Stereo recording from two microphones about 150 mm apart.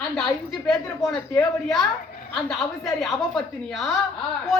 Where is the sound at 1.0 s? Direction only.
20° left (ahead or behind).